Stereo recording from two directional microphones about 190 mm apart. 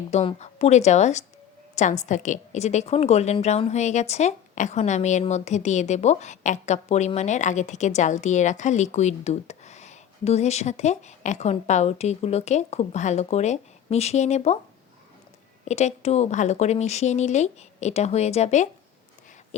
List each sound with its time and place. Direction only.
0.1 s a woman's voice: 35° left (ahead or behind)
15.6 s a woman's voice: 35° left (ahead or behind)